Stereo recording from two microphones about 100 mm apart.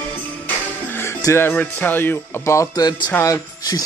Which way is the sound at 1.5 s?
15° left (ahead or behind).